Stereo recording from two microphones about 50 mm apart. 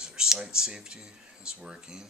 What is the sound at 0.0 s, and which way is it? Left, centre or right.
Speech, centre.